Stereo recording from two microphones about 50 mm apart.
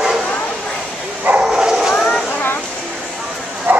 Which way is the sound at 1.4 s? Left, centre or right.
Centre.